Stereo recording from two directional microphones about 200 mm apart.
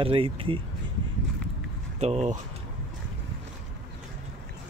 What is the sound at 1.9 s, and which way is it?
Speech, 35° right (ahead or behind).